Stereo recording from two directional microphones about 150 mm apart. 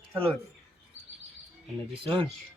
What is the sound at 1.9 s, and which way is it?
Speech, 35° right (ahead or behind).